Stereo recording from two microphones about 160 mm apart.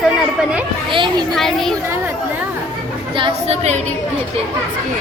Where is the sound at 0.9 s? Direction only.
30° right (ahead or behind).